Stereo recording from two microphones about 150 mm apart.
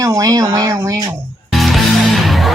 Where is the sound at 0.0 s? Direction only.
20° right (ahead or behind).